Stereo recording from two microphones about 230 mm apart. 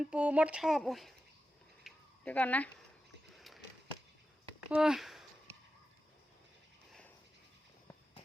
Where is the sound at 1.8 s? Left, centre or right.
Centre.